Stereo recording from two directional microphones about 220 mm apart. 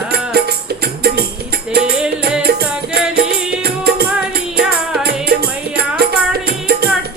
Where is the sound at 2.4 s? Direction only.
45° right (ahead or behind).